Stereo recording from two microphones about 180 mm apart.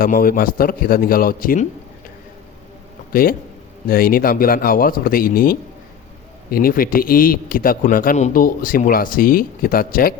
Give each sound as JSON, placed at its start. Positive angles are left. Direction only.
{"t": 0.0, "sound": "a man's voice", "side_deg": 55}
{"t": 3.1, "sound": "a man's voice", "side_deg": 55}